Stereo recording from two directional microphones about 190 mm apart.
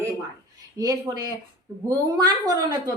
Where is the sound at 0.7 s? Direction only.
20° right (ahead or behind).